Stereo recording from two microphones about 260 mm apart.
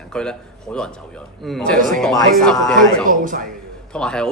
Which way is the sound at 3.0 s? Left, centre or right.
Right.